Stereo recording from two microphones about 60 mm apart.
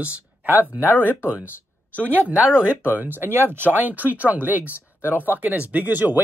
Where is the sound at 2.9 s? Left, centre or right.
Right.